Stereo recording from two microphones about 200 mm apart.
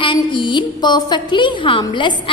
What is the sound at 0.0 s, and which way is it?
A woman's voice, 25° left (ahead or behind).